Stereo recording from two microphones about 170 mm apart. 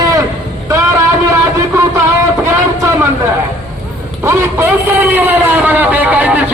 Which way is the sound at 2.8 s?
15° right (ahead or behind).